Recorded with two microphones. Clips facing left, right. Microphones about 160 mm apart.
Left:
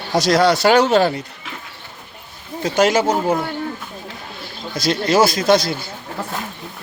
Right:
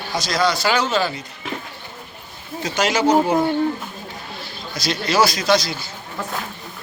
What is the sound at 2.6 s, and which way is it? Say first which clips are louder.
Speech: left 4 dB; 50° left (ahead or behind).